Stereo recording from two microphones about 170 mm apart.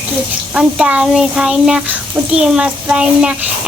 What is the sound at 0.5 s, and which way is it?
Speech, 5° right (ahead or behind).